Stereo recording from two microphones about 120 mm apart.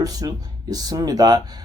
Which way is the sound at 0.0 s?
30° right (ahead or behind).